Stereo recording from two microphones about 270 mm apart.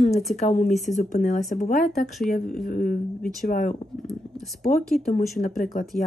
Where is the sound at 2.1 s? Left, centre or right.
Centre.